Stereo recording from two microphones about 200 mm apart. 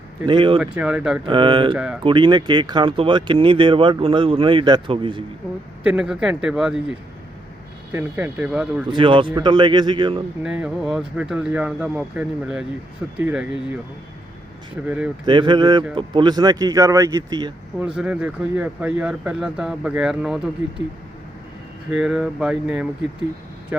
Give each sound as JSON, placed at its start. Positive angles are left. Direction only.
{"t": 0.3, "sound": "speech", "side_deg": -25}
{"t": 0.6, "sound": "speech", "side_deg": -5}
{"t": 1.3, "sound": "speech", "side_deg": -25}
{"t": 1.7, "sound": "speech", "side_deg": -5}
{"t": 2.0, "sound": "speech", "side_deg": -25}
{"t": 5.8, "sound": "speech", "side_deg": -5}
{"t": 7.9, "sound": "speech", "side_deg": -10}
{"t": 8.9, "sound": "speech", "side_deg": -25}
{"t": 10.4, "sound": "speech", "side_deg": -5}
{"t": 14.8, "sound": "speech", "side_deg": -5}
{"t": 15.3, "sound": "speech", "side_deg": -25}
{"t": 17.7, "sound": "speech", "side_deg": -5}
{"t": 21.9, "sound": "speech", "side_deg": 0}